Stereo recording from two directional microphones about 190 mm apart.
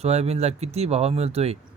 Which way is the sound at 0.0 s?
35° right (ahead or behind).